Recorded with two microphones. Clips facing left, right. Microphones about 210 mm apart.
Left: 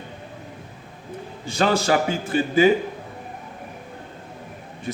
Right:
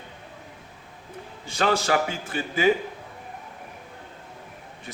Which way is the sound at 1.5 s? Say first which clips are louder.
Left 3 dB; 35° left (ahead or behind).